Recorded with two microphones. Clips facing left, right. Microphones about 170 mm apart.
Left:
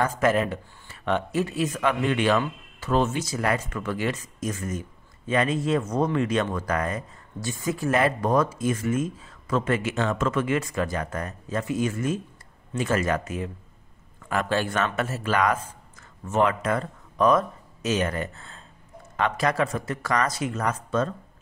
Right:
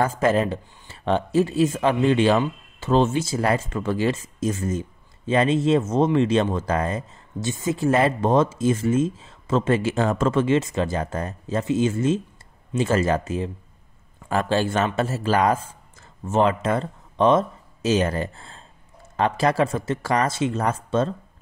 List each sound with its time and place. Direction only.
0.0 s speech: 30° right (ahead or behind)